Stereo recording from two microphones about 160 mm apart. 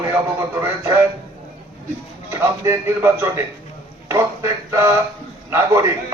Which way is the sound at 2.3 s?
15° right (ahead or behind).